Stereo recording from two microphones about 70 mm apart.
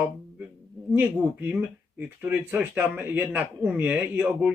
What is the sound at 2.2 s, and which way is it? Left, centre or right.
A man's voice, right.